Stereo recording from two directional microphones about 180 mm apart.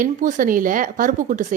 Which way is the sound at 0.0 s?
45° right (ahead or behind).